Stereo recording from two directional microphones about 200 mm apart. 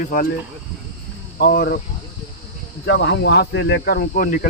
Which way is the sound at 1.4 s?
50° left (ahead or behind).